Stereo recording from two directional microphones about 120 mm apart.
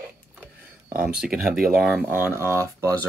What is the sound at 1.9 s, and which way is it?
Speech, 15° right (ahead or behind).